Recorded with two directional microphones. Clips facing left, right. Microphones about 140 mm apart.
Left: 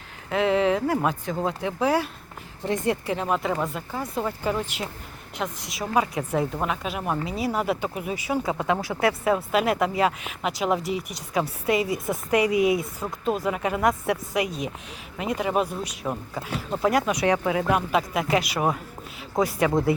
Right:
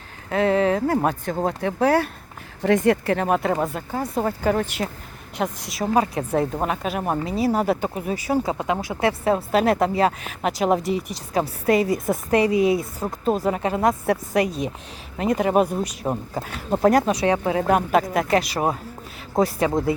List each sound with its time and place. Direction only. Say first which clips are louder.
0.3 s speech: right 2 dB; 40° right (ahead or behind)
2.6 s speech: right 7 dB; 80° right; by 3.5 s 50° right (ahead or behind)
3.5 s speech: right 4 dB; 40° right (ahead or behind)
5.4 s speech: right 5 dB; 35° right (ahead or behind)
8.5 s speech: right 1 dB; 20° right (ahead or behind); by 11.9 s 45° right (ahead or behind)
12.0 s speech: right 3 dB; 30° right (ahead or behind)
14.3 s speech: right 5 dB; 40° right (ahead or behind)